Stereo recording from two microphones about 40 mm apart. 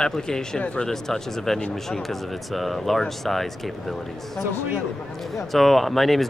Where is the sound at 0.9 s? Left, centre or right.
Centre.